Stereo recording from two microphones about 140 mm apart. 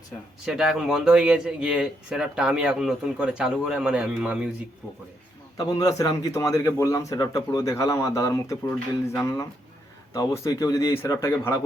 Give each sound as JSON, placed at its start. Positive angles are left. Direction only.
{"t": 0.4, "sound": "speech", "side_deg": -5}
{"t": 5.5, "sound": "a man's voice", "side_deg": 25}